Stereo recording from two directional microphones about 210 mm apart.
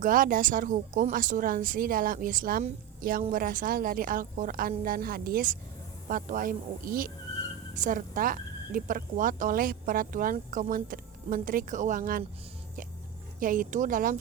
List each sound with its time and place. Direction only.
0.0 s a woman's voice: 40° right (ahead or behind)
13.4 s speech: 40° right (ahead or behind)